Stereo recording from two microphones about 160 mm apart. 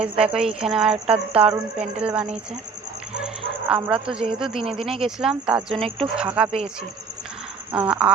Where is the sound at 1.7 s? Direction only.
40° right (ahead or behind).